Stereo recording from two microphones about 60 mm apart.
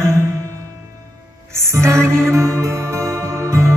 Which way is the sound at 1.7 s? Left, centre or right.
Right.